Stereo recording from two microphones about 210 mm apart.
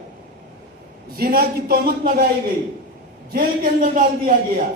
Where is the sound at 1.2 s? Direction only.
45° right (ahead or behind).